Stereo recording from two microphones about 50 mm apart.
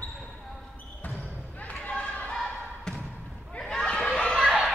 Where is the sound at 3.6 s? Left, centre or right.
Centre.